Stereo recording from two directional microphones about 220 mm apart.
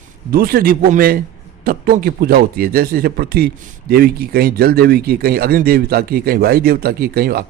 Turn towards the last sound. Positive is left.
turn(degrees=-45)  # may be behind; listen again after turning